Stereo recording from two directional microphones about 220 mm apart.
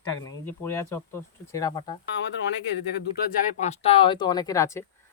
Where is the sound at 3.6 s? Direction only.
30° left (ahead or behind); by 4.8 s 15° left (ahead or behind).